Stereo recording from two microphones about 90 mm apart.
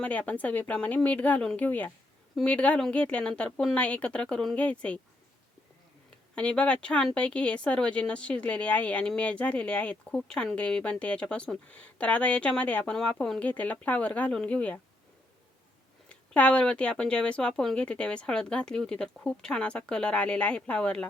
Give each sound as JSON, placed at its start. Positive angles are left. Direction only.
{"t": 0.0, "sound": "speech", "side_deg": 15}
{"t": 6.3, "sound": "speech", "side_deg": 10}
{"t": 16.0, "sound": "speech", "side_deg": 10}